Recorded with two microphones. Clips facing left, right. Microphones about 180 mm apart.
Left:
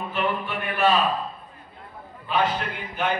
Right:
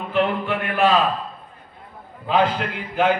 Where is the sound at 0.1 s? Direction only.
90° right.